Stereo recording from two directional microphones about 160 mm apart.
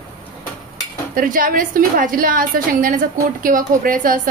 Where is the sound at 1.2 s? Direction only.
60° right (ahead or behind).